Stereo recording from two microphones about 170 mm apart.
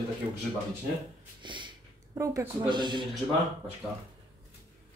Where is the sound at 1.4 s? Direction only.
25° right (ahead or behind).